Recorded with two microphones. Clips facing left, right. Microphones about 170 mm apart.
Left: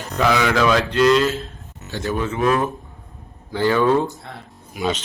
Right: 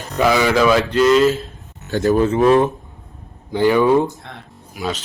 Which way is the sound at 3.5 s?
15° right (ahead or behind).